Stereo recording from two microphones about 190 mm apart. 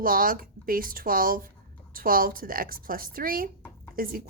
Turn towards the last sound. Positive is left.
turn(degrees=-50)  # may be behind; listen again after turning